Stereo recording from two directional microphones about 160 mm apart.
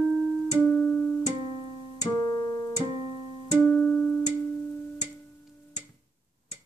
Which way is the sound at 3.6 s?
10° left (ahead or behind).